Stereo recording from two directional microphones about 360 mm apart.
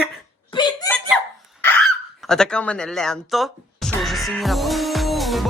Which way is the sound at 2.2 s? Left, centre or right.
Centre.